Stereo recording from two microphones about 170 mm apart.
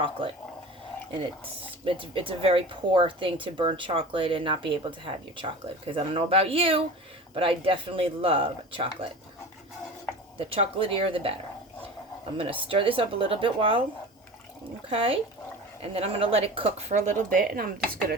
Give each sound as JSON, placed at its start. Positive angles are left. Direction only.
{"t": 0.2, "sound": "speech", "side_deg": -30}
{"t": 1.8, "sound": "speech", "side_deg": -30}
{"t": 10.3, "sound": "speech", "side_deg": -35}
{"t": 12.6, "sound": "speech", "side_deg": -30}
{"t": 14.8, "sound": "speech", "side_deg": -35}